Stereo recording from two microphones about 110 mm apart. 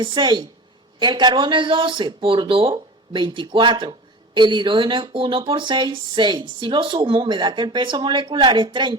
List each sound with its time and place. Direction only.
0.0 s speech: 45° right (ahead or behind)